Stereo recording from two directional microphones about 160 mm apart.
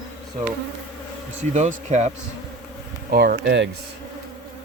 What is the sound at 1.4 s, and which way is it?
Speech, 45° right (ahead or behind).